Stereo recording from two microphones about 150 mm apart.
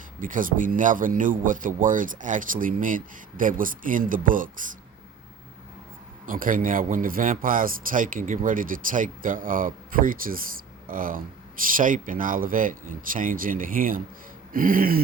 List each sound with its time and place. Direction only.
0.2 s a man's voice: 65° right (ahead or behind)
6.2 s a man's voice: 65° right (ahead or behind)